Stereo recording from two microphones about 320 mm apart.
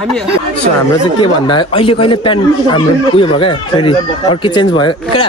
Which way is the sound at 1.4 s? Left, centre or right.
Centre.